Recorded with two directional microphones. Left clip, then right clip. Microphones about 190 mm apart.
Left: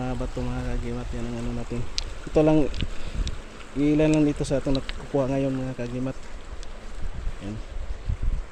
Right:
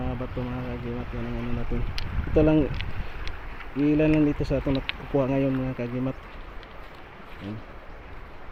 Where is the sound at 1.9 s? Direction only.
5° left (ahead or behind).